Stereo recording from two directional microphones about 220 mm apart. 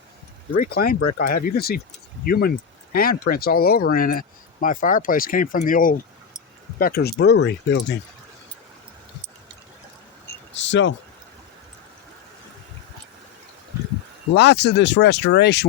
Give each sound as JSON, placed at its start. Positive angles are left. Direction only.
{"t": 0.6, "sound": "speech", "side_deg": 40}
{"t": 10.5, "sound": "a sound", "side_deg": 55}
{"t": 14.3, "sound": "speech", "side_deg": 50}